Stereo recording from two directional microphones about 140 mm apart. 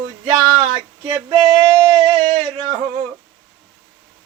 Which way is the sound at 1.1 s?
30° right (ahead or behind).